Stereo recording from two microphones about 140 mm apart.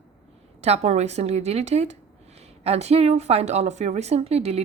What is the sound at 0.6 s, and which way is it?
A woman's voice, 50° right (ahead or behind).